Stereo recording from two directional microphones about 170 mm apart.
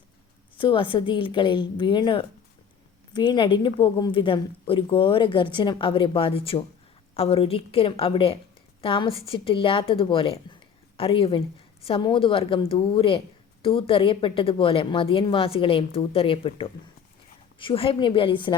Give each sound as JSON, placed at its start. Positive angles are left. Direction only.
{"t": 0.5, "sound": "a woman's voice", "side_deg": 30}